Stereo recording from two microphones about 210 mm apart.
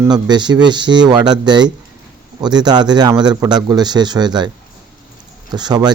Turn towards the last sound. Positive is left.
turn(degrees=-20)  # may be behind; listen again after turning